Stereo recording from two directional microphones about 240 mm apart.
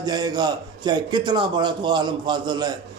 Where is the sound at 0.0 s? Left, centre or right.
Centre.